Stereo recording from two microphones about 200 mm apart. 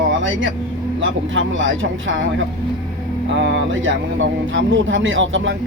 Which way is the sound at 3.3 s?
70° right (ahead or behind).